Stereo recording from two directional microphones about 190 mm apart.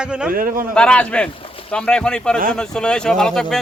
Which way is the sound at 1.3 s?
30° left (ahead or behind).